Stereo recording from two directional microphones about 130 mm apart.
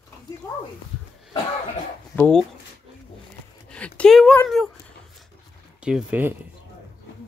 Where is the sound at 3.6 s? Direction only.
10° left (ahead or behind).